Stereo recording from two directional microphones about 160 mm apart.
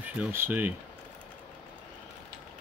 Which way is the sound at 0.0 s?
10° right (ahead or behind).